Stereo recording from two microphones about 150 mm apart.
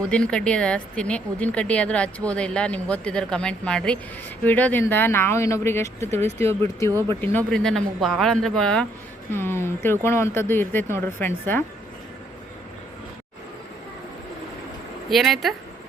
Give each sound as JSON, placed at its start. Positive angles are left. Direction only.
{"t": 0.1, "sound": "speech", "side_deg": 5}
{"t": 6.1, "sound": "speech", "side_deg": -45}
{"t": 6.4, "sound": "speech", "side_deg": 20}
{"t": 9.3, "sound": "speech", "side_deg": 15}
{"t": 15.1, "sound": "speech", "side_deg": 0}